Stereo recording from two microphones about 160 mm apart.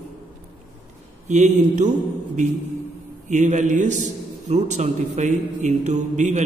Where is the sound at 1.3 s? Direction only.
50° right (ahead or behind).